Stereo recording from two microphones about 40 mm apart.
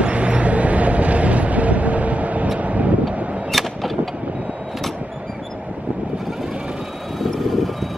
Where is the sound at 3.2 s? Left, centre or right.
Right.